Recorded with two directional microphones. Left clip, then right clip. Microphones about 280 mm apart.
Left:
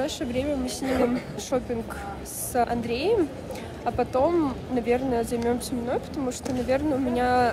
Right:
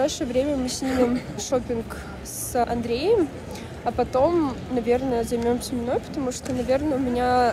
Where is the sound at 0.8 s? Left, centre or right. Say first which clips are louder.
Right 2 dB; left.